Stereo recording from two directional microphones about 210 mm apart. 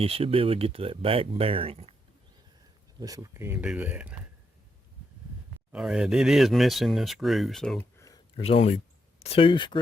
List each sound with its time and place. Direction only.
0.0 s speech: 25° right (ahead or behind)
3.0 s speech: 15° right (ahead or behind)
5.7 s speech: 5° right (ahead or behind); by 8.2 s 15° left (ahead or behind)
8.4 s speech: 30° left (ahead or behind)